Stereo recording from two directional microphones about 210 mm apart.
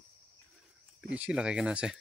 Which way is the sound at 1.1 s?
5° right (ahead or behind).